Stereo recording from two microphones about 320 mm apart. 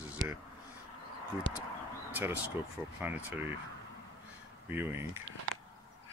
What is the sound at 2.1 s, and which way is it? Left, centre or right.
Speech, centre.